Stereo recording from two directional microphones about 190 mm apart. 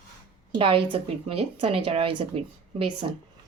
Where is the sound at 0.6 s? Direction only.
30° right (ahead or behind).